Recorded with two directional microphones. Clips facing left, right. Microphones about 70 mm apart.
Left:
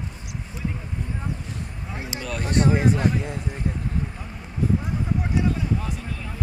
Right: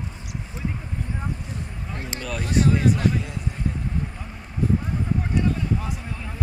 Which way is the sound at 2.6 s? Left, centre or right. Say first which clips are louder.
Left 1 dB; left.